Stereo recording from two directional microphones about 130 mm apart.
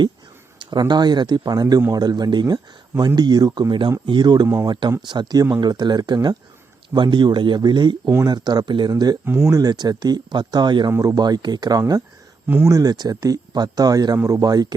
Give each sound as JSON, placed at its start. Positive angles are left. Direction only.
{"t": 0.6, "sound": "speech", "side_deg": -35}
{"t": 9.2, "sound": "speech", "side_deg": -20}